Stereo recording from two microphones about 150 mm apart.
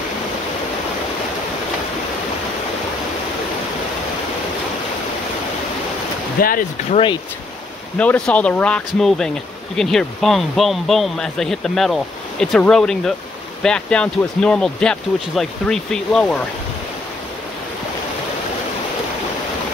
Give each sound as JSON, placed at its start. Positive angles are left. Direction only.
{"t": 6.4, "sound": "speech", "side_deg": 70}
{"t": 8.0, "sound": "speech", "side_deg": 10}